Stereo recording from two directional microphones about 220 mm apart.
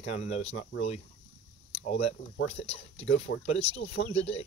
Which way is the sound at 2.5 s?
25° left (ahead or behind).